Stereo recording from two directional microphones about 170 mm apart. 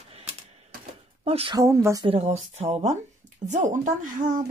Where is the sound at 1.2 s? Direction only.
35° right (ahead or behind).